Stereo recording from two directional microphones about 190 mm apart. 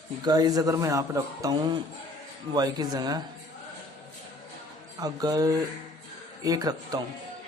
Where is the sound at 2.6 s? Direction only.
20° right (ahead or behind).